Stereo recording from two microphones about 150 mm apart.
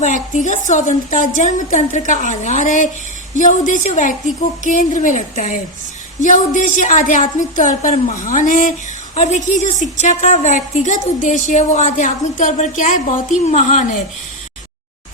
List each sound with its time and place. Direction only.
0.0 s a woman's voice: 55° left (ahead or behind)